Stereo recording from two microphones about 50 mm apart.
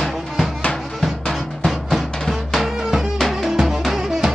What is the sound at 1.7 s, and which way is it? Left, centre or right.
Music, centre.